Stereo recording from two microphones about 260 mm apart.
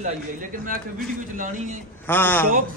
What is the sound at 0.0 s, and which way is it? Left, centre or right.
A man's voice, right.